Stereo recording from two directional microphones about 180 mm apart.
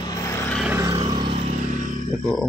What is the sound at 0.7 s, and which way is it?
Vehicle, 15° right (ahead or behind).